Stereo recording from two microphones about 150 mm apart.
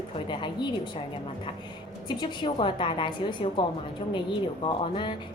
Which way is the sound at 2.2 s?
30° left (ahead or behind).